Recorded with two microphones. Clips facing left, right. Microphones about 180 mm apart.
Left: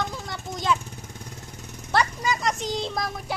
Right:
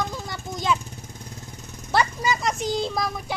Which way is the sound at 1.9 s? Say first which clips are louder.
Right 1 dB; 5° right (ahead or behind).